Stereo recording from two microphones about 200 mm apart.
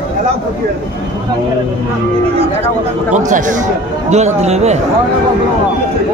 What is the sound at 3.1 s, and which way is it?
A man's voice, 40° right (ahead or behind).